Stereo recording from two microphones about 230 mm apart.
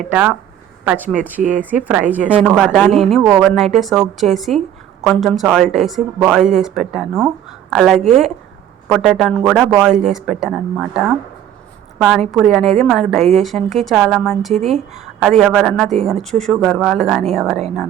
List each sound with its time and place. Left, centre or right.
0.0 s a woman's voice: centre
1.4 s speech: right
1.8 s a woman's voice: centre
11.9 s a woman's voice: centre